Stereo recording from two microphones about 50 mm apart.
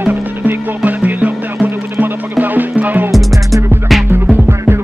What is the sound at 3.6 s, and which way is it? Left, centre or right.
Music, right.